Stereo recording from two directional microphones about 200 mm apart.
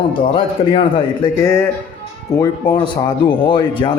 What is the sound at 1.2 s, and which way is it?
Speech, 15° left (ahead or behind).